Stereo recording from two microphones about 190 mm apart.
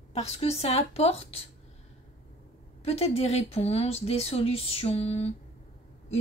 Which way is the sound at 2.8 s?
30° left (ahead or behind).